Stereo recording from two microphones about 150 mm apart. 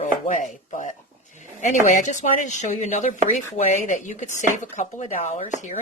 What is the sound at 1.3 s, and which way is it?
Speech, 55° left (ahead or behind).